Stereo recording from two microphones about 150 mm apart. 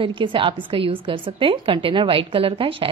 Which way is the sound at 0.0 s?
35° right (ahead or behind).